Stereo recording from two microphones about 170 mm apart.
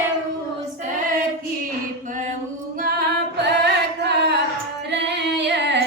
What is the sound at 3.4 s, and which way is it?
Music, 85° right.